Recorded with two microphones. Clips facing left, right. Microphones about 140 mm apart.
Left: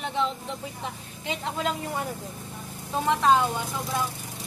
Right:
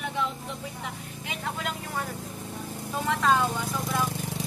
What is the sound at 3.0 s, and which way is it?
Speech, 20° left (ahead or behind).